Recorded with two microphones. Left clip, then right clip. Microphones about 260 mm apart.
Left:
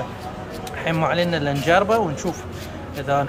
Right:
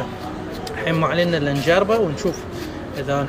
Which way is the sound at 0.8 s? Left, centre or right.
Centre.